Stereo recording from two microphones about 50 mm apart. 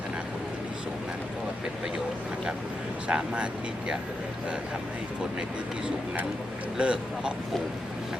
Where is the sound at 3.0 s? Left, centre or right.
Centre.